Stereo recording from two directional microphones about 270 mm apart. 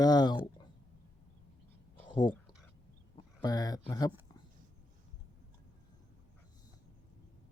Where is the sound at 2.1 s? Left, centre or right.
Centre.